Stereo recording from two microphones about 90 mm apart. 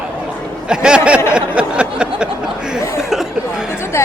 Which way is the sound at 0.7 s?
10° right (ahead or behind).